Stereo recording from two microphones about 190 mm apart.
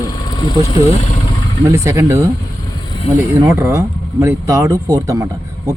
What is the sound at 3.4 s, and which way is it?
Speech, 15° right (ahead or behind).